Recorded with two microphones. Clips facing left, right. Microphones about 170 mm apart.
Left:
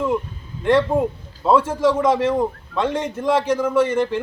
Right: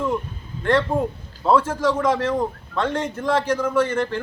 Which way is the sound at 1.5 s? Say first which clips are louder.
Left 3 dB; 20° left (ahead or behind).